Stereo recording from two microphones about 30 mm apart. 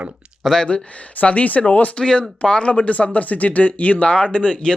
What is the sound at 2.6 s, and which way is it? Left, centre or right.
Speech, left.